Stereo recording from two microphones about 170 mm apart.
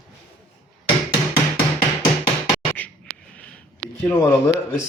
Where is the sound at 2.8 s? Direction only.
10° left (ahead or behind).